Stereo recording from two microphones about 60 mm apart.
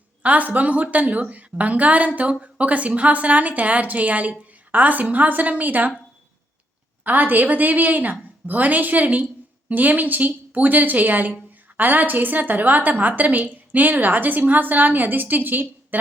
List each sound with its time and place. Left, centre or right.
0.2 s a woman's voice: right
7.0 s a woman's voice: right